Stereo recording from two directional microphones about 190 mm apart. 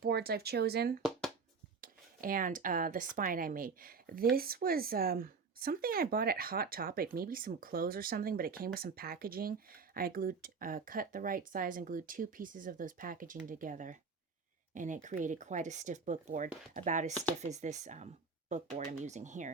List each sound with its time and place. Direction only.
0.0 s speech: 55° right (ahead or behind)
1.8 s speech: 45° right (ahead or behind)